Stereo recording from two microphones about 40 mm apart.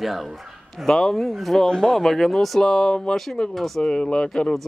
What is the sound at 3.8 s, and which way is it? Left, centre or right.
Speech, left.